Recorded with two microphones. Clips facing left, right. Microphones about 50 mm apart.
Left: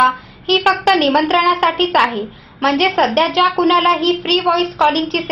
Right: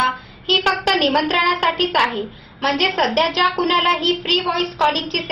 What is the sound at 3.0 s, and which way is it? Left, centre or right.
Speech, left.